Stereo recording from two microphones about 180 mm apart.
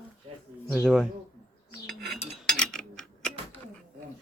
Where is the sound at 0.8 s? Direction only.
5° right (ahead or behind).